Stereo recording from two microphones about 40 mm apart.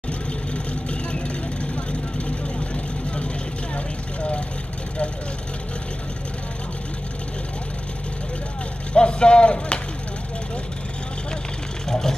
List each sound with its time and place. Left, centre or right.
0.8 s vehicle: left
3.7 s vehicle: left
8.9 s a sound: left
11.9 s vehicle: centre